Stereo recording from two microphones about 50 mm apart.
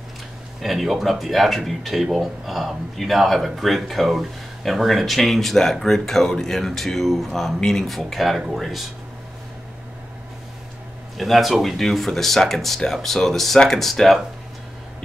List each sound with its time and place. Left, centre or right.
0.6 s speech: centre
11.1 s speech: centre